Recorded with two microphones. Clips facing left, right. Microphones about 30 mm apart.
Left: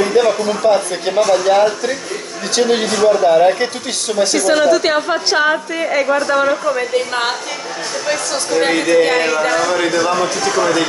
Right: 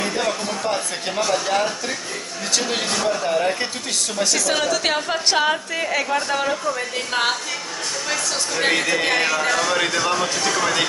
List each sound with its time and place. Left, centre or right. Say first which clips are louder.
0.0 s a woman's voice: left 9 dB; centre